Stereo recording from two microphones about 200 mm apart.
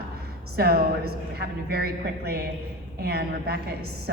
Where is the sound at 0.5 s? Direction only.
50° right (ahead or behind).